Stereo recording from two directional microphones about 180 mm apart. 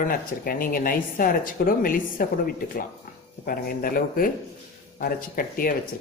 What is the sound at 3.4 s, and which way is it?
Speech, 50° left (ahead or behind).